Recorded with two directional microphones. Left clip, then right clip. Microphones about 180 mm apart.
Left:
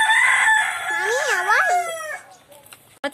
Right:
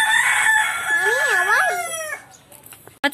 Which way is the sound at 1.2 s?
60° left (ahead or behind).